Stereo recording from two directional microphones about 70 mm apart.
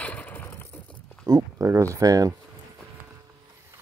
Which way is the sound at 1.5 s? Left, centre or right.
Right.